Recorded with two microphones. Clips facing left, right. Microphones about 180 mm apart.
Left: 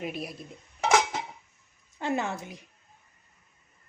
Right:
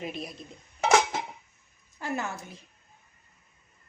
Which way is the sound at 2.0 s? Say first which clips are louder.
Left 3 dB; 25° left (ahead or behind).